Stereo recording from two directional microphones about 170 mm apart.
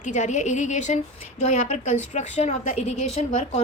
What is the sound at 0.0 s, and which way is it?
A woman's voice, 45° left (ahead or behind).